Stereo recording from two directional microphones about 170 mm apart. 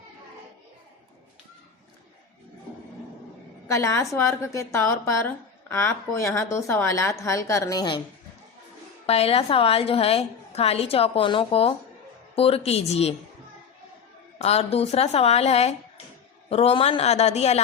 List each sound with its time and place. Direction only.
3.7 s a woman's voice: 15° left (ahead or behind)
9.0 s a woman's voice: 35° left (ahead or behind)
14.3 s a woman's voice: 35° left (ahead or behind)